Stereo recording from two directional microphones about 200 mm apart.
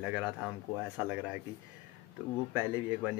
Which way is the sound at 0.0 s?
5° right (ahead or behind).